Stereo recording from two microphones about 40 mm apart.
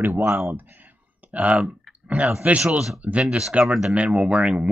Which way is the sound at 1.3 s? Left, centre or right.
Right.